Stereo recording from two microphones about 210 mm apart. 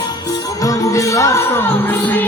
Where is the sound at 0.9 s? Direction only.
15° left (ahead or behind).